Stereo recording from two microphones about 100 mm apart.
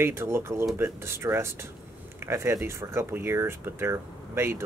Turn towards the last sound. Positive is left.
turn(degrees=-25)  # may be behind; listen again after turning